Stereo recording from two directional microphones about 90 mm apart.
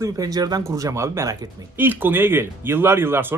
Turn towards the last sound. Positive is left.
turn(degrees=-25)  # may be behind; listen again after turning